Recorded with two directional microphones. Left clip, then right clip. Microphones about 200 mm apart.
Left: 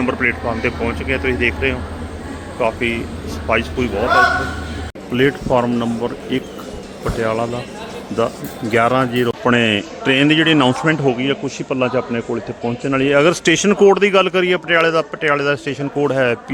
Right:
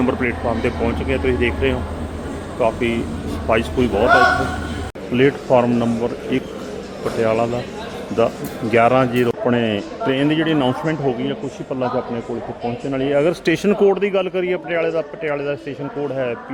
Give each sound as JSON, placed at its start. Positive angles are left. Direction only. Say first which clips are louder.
{"t": 0.0, "sound": "a man's voice", "louder": "left 2 dB", "side_deg": -10}
{"t": 5.1, "sound": "a man's voice", "louder": "right 1 dB", "side_deg": 5}
{"t": 8.7, "sound": "speech", "louder": "right 1 dB", "side_deg": 0}